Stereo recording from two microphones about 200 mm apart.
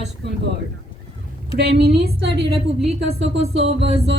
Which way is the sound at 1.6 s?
55° right (ahead or behind).